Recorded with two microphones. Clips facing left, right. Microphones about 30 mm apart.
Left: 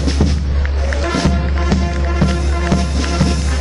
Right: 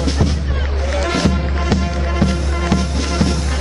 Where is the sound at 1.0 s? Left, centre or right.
Centre.